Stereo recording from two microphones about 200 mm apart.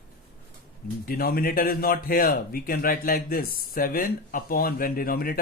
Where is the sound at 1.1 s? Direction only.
50° left (ahead or behind).